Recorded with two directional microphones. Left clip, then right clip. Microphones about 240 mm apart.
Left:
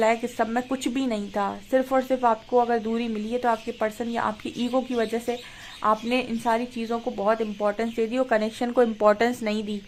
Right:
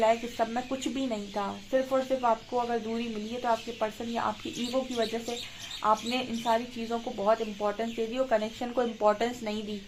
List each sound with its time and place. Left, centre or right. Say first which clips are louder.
0.0 s speech: left 3 dB; left